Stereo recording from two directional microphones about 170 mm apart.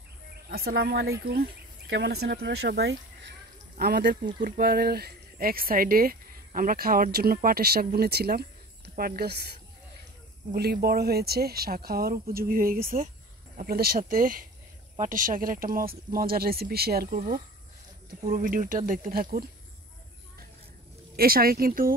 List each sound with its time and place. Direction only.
0.5 s speech: 65° right (ahead or behind); by 3.3 s 90° right
3.7 s speech: 70° right (ahead or behind)
10.5 s speech: 65° right (ahead or behind)
18.3 s speech: 50° right (ahead or behind)
21.2 s speech: 60° right (ahead or behind)